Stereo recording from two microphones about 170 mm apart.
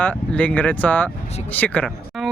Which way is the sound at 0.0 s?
10° left (ahead or behind).